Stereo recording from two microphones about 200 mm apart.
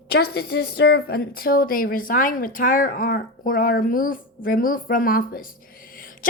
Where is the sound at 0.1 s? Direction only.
50° left (ahead or behind).